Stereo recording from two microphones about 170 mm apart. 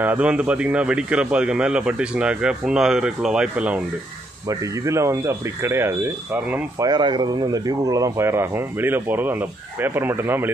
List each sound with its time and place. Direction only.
0.0 s speech: 10° right (ahead or behind)
4.5 s speech: 15° right (ahead or behind)
6.8 s speech: 25° right (ahead or behind)